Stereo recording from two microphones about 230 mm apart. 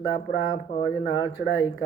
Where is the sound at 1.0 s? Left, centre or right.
Left.